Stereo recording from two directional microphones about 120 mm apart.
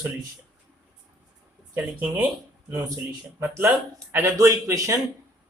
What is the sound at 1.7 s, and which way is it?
Speech, 15° right (ahead or behind).